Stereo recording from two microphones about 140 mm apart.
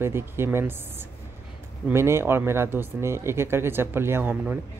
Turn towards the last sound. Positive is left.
turn(degrees=-15)  # may be behind; listen again after turning